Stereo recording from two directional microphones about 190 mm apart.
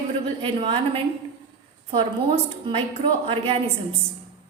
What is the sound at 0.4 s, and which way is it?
Speech, 30° right (ahead or behind).